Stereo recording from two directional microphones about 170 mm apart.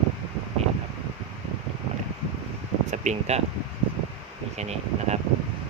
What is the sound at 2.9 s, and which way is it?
Speech, 45° right (ahead or behind).